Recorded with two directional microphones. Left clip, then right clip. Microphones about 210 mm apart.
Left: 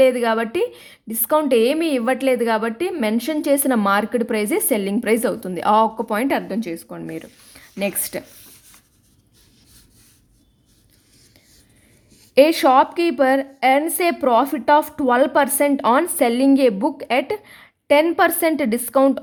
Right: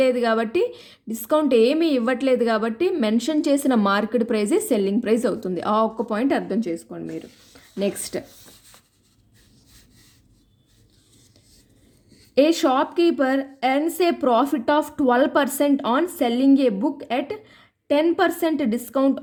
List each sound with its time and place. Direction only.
0.0 s a woman's voice: 25° left (ahead or behind)
12.3 s a woman's voice: 25° left (ahead or behind)